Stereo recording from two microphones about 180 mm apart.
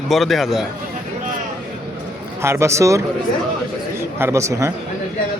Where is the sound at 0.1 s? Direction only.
Centre (ahead or behind).